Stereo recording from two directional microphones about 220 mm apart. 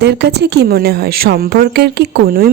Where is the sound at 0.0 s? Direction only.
50° right (ahead or behind).